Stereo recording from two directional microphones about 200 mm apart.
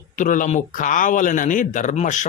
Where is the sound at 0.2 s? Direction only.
40° left (ahead or behind).